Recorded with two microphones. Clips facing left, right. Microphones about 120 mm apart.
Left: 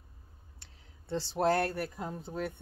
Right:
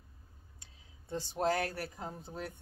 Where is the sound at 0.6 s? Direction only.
85° left.